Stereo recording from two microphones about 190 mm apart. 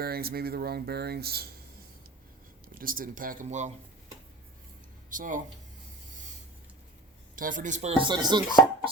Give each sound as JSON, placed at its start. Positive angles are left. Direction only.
{"t": 0.0, "sound": "speech", "side_deg": -55}
{"t": 2.7, "sound": "speech", "side_deg": -45}
{"t": 5.0, "sound": "speech", "side_deg": -45}
{"t": 7.3, "sound": "speech", "side_deg": -45}